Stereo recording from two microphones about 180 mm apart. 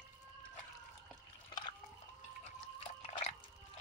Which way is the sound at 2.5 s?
35° left (ahead or behind).